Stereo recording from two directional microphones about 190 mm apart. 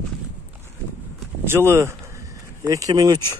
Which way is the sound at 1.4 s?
15° right (ahead or behind).